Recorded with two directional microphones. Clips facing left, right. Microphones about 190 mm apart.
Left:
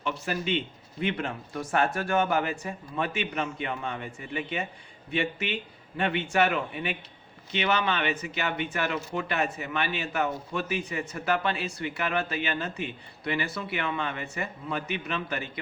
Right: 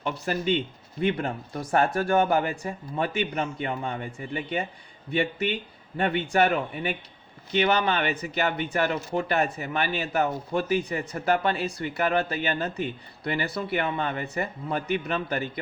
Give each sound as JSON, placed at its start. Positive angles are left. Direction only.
{"t": 0.0, "sound": "speech", "side_deg": -35}